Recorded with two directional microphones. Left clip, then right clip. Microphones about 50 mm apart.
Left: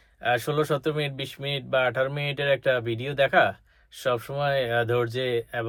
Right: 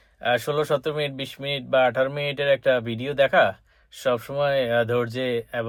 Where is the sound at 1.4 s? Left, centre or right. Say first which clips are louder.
Right 4 dB; centre.